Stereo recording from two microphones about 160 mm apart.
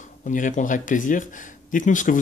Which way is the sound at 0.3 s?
55° left (ahead or behind).